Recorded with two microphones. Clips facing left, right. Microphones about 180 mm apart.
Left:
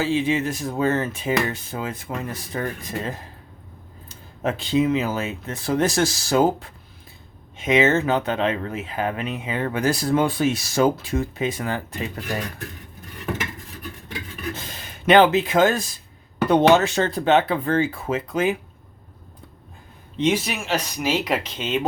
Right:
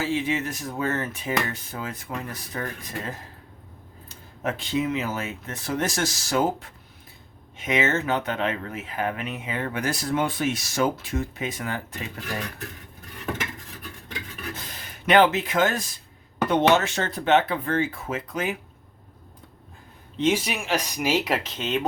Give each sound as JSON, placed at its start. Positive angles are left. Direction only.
{"t": 0.0, "sound": "speech", "side_deg": 30}
{"t": 4.4, "sound": "speech", "side_deg": 30}
{"t": 14.5, "sound": "speech", "side_deg": 25}
{"t": 20.1, "sound": "speech", "side_deg": -5}